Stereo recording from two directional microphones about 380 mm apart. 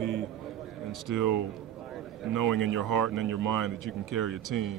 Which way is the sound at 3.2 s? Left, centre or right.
Right.